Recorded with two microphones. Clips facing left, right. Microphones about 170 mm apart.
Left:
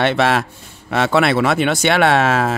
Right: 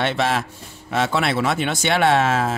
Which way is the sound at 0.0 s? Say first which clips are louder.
Left 5 dB; 70° left (ahead or behind).